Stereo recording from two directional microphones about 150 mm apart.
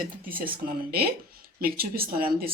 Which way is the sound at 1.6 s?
80° right.